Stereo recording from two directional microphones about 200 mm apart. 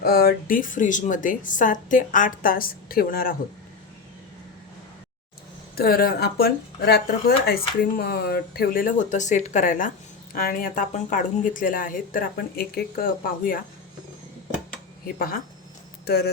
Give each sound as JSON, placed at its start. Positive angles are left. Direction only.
{"t": 0.0, "sound": "speech", "side_deg": 50}
{"t": 5.7, "sound": "speech", "side_deg": 50}
{"t": 15.0, "sound": "speech", "side_deg": 45}